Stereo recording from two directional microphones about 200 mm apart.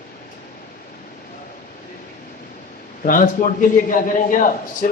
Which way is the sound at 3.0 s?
40° left (ahead or behind).